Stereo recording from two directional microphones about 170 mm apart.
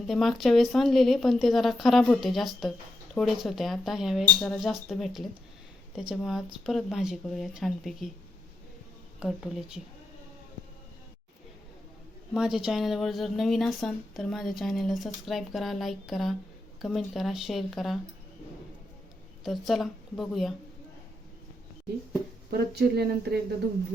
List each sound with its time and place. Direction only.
0.1 s speech: centre (ahead or behind)
9.2 s speech: 5° right (ahead or behind)
12.3 s speech: 5° right (ahead or behind)
19.5 s speech: centre (ahead or behind)
22.4 s speech: 70° right (ahead or behind)